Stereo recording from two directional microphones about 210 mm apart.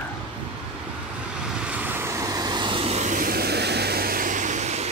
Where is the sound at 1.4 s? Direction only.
5° right (ahead or behind); by 4.9 s 35° right (ahead or behind).